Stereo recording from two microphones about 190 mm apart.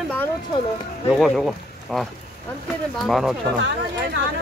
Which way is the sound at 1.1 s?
Centre (ahead or behind).